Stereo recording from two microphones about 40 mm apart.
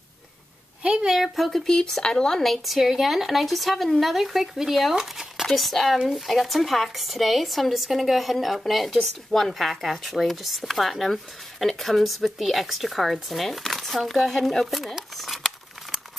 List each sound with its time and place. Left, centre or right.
0.8 s a sound: right
1.1 s speech: centre
2.4 s speech: centre
4.9 s a sound: centre
5.5 s speech: centre
15.1 s crumpling: centre